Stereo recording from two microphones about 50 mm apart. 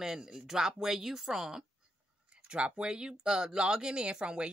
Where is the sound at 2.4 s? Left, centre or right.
Centre.